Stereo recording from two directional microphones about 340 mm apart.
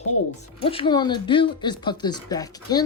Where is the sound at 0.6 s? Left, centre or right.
Centre.